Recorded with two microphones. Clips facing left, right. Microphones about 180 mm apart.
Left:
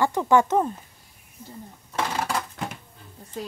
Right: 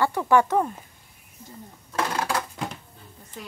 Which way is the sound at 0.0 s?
15° left (ahead or behind).